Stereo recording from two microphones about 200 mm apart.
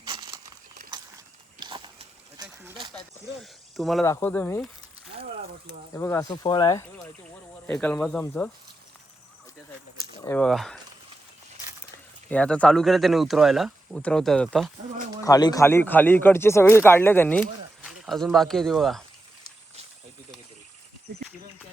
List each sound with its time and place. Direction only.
0.0 s crumpling: 20° right (ahead or behind)
0.9 s a sound: 20° right (ahead or behind)
2.9 s speech: centre (ahead or behind)
4.0 s speech: 10° left (ahead or behind)
5.9 s speech: 15° left (ahead or behind)
7.7 s speech: 5° left (ahead or behind)
10.2 s speech: 5° left (ahead or behind)
12.3 s speech: 5° left (ahead or behind)
15.2 s speech: 20° left (ahead or behind); by 19.0 s centre (ahead or behind)